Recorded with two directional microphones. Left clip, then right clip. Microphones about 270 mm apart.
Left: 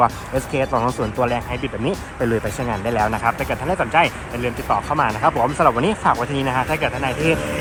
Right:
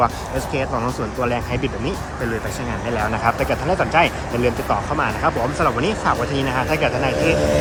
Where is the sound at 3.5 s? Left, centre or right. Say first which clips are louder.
Right 1 dB; centre.